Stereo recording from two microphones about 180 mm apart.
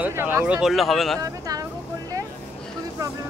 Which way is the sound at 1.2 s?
20° right (ahead or behind).